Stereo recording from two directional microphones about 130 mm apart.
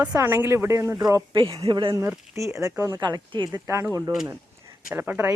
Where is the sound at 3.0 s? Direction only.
35° right (ahead or behind).